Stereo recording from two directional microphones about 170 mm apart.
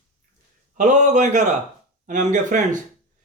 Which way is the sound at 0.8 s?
45° right (ahead or behind).